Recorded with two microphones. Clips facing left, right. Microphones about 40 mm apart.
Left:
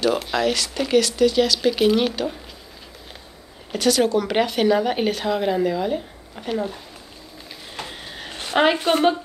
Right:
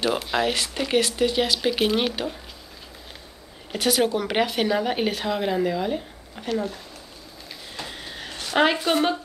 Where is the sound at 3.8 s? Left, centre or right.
Centre.